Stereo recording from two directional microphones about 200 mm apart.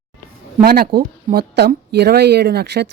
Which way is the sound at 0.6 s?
50° right (ahead or behind).